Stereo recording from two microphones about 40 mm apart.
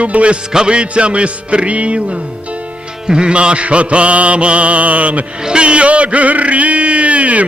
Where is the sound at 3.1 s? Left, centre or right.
Right.